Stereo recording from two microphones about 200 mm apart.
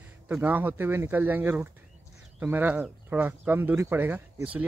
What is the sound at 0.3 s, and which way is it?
Speech, 10° right (ahead or behind).